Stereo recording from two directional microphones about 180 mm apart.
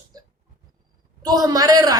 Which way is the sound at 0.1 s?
20° right (ahead or behind).